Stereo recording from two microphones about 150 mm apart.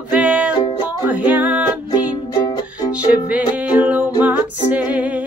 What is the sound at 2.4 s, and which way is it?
Music, 30° left (ahead or behind).